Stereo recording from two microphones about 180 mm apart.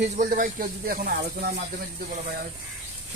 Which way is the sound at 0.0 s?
50° right (ahead or behind).